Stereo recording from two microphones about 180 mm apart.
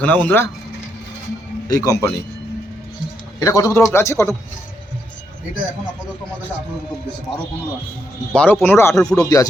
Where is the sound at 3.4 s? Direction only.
15° left (ahead or behind).